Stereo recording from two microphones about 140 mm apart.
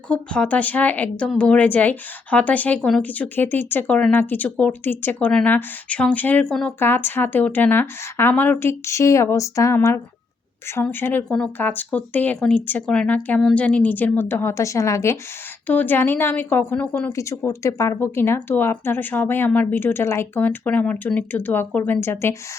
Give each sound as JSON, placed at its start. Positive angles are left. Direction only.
{"t": 0.1, "sound": "speech", "side_deg": 10}
{"t": 6.7, "sound": "speech", "side_deg": 15}